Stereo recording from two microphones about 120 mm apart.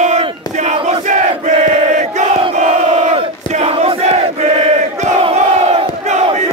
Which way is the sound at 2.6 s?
80° right.